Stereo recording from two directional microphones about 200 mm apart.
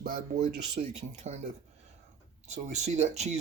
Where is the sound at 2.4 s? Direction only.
35° right (ahead or behind).